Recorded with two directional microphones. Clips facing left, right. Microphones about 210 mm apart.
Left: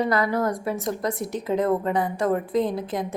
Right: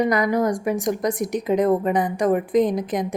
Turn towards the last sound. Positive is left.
turn(degrees=-15)  # may be behind; listen again after turning